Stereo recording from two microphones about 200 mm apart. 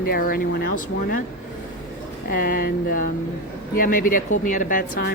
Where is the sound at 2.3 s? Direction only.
45° left (ahead or behind).